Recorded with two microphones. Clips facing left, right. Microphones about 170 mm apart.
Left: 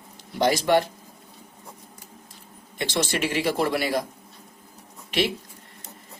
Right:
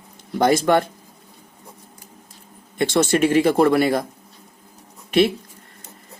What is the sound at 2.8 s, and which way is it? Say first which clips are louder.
Speech: right 8 dB; 45° right (ahead or behind).